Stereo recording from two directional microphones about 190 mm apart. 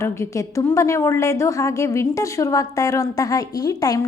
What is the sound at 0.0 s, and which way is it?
A woman's voice, 15° left (ahead or behind).